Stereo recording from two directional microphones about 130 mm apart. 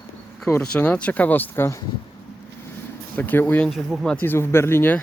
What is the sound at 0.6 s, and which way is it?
Speech, 10° left (ahead or behind).